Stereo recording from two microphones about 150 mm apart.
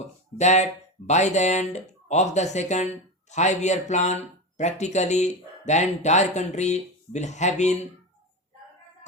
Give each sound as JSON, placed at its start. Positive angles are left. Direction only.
{"t": 0.0, "sound": "speech", "side_deg": 50}